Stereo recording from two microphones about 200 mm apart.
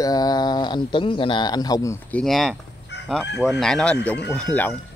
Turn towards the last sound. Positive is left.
turn(degrees=5)  # may be behind; listen again after turning